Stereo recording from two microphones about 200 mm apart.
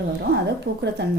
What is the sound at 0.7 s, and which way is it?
Speech, 50° right (ahead or behind).